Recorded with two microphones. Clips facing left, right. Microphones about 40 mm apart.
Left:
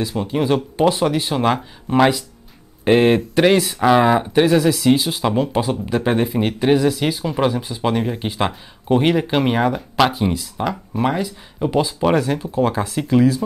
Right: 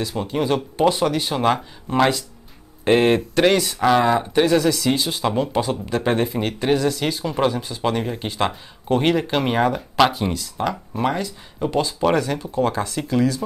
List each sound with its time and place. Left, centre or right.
0.0 s speech: centre